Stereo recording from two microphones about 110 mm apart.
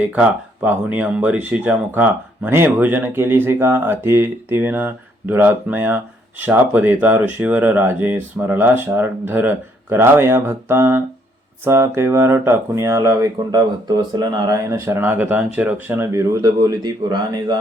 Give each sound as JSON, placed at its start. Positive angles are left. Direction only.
{"t": 0.1, "sound": "speech", "side_deg": -15}
{"t": 14.7, "sound": "speech", "side_deg": -25}